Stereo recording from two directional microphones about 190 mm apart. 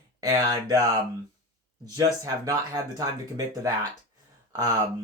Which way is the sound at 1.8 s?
20° right (ahead or behind).